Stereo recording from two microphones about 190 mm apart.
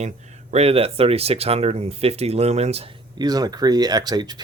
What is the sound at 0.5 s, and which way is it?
Speech, 30° right (ahead or behind).